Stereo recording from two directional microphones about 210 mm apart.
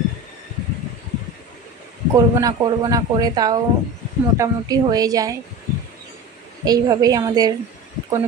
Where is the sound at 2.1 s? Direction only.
15° right (ahead or behind).